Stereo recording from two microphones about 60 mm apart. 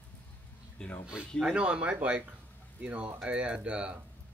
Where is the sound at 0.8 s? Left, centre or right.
Centre.